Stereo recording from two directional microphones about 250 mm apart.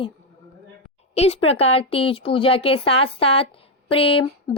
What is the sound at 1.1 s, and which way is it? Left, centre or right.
A woman's voice, left.